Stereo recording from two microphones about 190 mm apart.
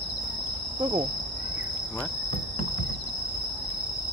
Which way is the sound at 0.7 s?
25° right (ahead or behind).